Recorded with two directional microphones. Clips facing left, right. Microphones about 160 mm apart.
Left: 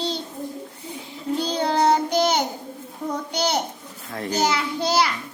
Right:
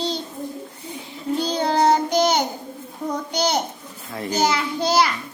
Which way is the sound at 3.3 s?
40° right (ahead or behind).